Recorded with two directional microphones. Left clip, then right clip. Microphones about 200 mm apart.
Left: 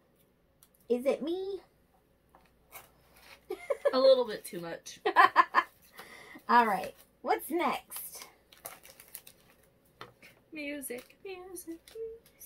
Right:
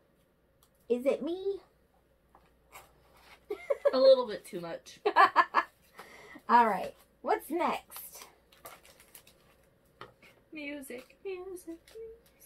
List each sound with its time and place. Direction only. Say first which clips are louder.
0.8 s a child's voice: even; centre (ahead or behind)
3.4 s a sound: right 1 dB; centre (ahead or behind)
3.9 s speech: right 1 dB; 35° left (ahead or behind)
5.0 s speech: left 1 dB; centre (ahead or behind)
6.0 s a sound: even; centre (ahead or behind)
10.5 s speech: left 2 dB; 35° left (ahead or behind)